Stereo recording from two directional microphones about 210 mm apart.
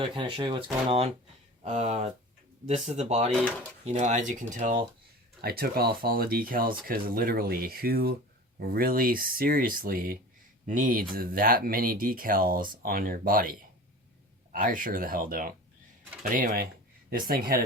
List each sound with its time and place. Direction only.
0.0 s speech: 20° right (ahead or behind); by 17.5 s 45° right (ahead or behind)